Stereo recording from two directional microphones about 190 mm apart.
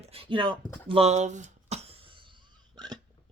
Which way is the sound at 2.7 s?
20° right (ahead or behind).